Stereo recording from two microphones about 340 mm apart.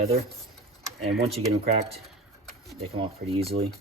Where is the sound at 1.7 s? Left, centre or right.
Centre.